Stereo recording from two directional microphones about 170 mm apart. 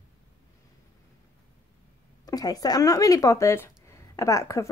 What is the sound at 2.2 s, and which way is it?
Speech, 20° left (ahead or behind).